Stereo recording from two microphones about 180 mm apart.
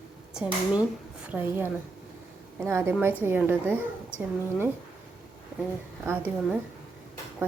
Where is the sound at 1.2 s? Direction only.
10° right (ahead or behind).